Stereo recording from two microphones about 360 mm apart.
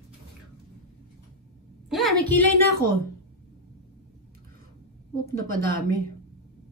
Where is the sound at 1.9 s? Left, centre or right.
Centre.